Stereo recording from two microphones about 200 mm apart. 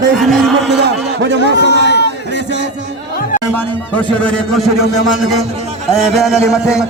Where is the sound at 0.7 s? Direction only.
60° right (ahead or behind).